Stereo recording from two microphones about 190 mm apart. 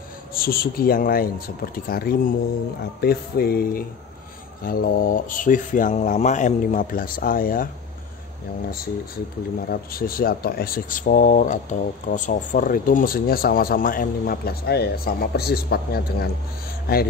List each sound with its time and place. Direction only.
0.3 s speech: 50° left (ahead or behind)
9.7 s speech: 50° left (ahead or behind)